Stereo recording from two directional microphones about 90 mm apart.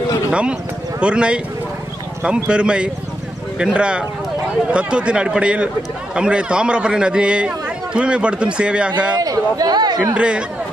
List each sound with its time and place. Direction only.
0.3 s a man's voice: 10° right (ahead or behind)
9.2 s speech: 45° right (ahead or behind)
10.1 s a man's voice: 10° right (ahead or behind)